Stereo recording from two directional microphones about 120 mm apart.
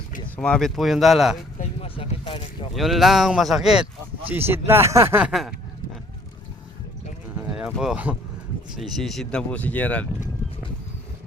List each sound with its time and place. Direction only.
0.3 s speech: 5° left (ahead or behind)
1.8 s zipper: 50° left (ahead or behind)
2.7 s speech: centre (ahead or behind)
4.3 s speech: 20° right (ahead or behind)
5.3 s speech: centre (ahead or behind)
7.5 s speech: 5° right (ahead or behind)
8.8 s speech: centre (ahead or behind)